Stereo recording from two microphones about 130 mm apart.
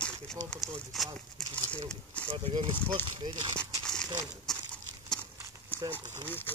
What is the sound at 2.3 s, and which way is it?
Speech, 45° right (ahead or behind).